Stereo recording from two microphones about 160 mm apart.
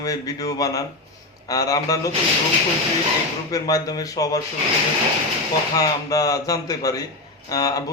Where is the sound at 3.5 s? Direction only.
20° left (ahead or behind).